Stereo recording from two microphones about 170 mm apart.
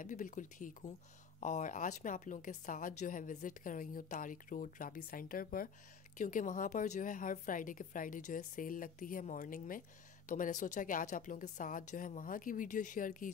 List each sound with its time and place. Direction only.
0.0 s a woman's voice: 50° left (ahead or behind)